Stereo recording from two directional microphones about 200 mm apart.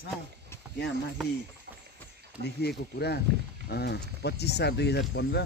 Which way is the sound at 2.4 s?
55° left (ahead or behind).